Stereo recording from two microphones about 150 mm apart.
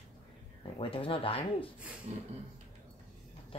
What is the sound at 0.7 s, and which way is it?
Speech, 35° left (ahead or behind).